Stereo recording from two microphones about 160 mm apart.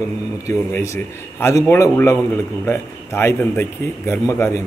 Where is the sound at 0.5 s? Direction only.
15° left (ahead or behind).